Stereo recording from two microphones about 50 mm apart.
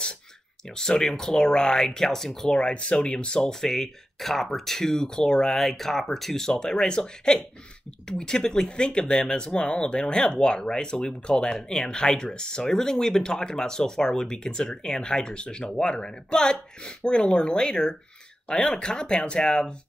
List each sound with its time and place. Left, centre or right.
0.7 s speech: centre
2.5 s speech: left
3.3 s speech: centre